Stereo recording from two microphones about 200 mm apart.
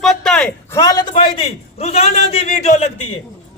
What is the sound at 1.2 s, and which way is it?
A man's voice, 30° left (ahead or behind).